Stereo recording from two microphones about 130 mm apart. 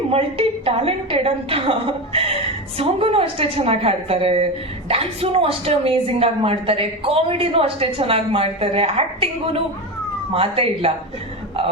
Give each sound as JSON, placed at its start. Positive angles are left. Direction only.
{"t": 0.1, "sound": "a woman's voice", "side_deg": -45}